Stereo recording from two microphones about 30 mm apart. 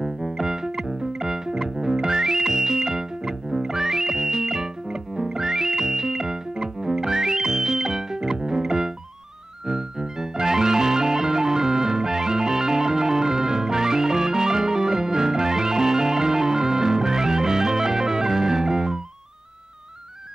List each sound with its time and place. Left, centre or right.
0.0 s music: centre